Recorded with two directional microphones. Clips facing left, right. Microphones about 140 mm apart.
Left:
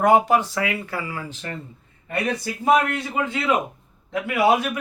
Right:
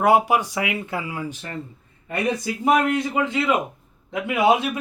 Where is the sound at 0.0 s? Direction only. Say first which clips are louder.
Left 1 dB; 10° right (ahead or behind).